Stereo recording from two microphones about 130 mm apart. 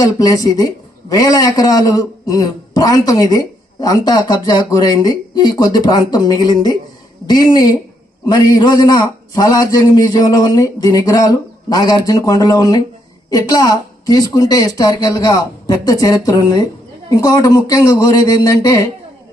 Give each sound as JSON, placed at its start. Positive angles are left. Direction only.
{"t": 0.0, "sound": "a woman's voice", "side_deg": 25}